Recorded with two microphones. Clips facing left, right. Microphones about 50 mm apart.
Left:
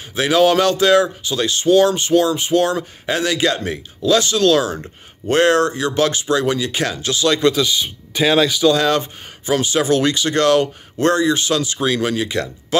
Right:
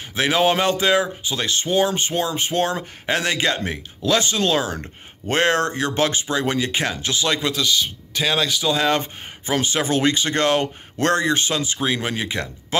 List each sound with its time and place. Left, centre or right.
0.1 s speech: right
7.5 s speech: centre
8.8 s speech: right
11.0 s speech: right
11.5 s speech: right